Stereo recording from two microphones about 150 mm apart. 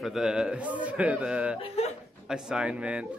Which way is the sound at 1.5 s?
45° left (ahead or behind).